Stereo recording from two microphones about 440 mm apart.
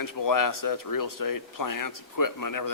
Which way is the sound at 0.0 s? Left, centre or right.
Left.